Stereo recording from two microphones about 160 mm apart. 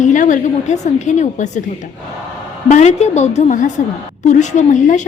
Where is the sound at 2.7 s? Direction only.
45° left (ahead or behind).